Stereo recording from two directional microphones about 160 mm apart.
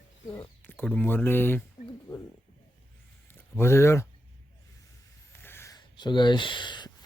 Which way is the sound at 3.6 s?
15° left (ahead or behind).